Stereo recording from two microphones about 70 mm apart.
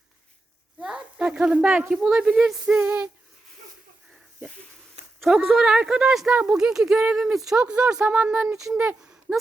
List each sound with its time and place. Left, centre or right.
0.8 s a sound: centre
1.9 s speech: centre
2.6 s female singing: right
5.2 s speech: centre
5.5 s speech: centre